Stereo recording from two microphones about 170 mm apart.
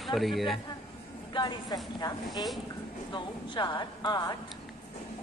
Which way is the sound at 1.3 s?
25° left (ahead or behind).